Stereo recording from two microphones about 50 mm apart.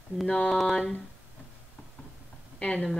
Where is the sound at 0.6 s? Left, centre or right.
Centre.